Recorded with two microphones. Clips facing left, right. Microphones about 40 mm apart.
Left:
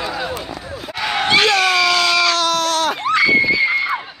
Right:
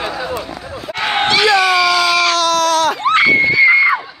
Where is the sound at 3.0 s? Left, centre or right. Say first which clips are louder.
Right 2 dB; right.